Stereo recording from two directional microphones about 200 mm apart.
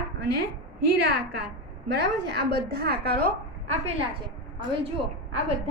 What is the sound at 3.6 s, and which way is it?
A woman's voice, 25° right (ahead or behind).